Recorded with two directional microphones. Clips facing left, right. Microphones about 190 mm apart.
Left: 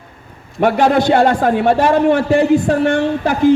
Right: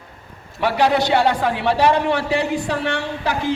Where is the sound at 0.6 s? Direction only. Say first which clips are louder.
Left 5 dB; 50° left (ahead or behind).